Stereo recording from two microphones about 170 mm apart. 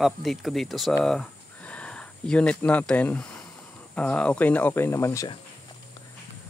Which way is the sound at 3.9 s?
5° left (ahead or behind).